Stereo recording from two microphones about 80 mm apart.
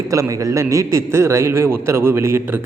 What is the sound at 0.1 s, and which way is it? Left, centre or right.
A man's voice, right.